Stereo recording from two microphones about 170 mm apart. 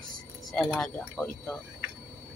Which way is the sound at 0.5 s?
5° left (ahead or behind).